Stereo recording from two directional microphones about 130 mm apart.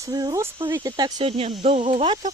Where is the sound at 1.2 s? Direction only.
50° right (ahead or behind).